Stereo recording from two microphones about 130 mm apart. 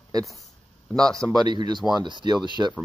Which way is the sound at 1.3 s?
35° right (ahead or behind).